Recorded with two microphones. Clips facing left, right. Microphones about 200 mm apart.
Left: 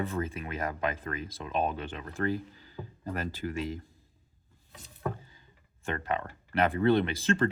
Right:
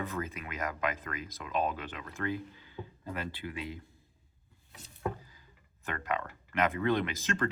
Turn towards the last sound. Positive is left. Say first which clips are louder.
# left 5 dB
turn(degrees=30)  # may be behind; listen again after turning